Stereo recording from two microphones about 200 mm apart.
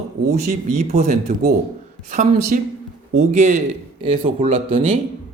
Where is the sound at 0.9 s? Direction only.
50° right (ahead or behind).